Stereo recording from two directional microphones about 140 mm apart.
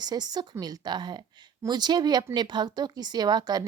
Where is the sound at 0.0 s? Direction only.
30° right (ahead or behind).